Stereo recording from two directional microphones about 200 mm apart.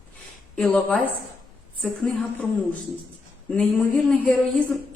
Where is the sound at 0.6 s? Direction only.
5° left (ahead or behind).